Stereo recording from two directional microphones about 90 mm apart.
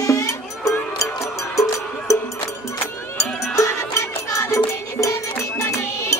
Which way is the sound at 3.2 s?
35° left (ahead or behind).